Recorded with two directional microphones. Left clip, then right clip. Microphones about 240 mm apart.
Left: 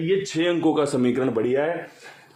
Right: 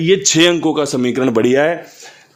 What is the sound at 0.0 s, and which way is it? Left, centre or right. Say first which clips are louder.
Speech: right 11 dB; right.